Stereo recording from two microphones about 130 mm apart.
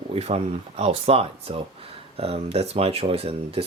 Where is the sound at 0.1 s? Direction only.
50° right (ahead or behind).